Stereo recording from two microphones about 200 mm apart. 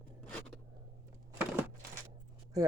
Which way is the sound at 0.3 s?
5° left (ahead or behind).